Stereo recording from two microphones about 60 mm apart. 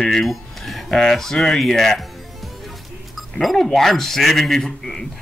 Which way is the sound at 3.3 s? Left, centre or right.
Centre.